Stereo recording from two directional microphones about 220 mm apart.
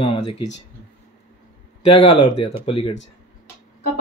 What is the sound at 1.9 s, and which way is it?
Speech, 25° left (ahead or behind).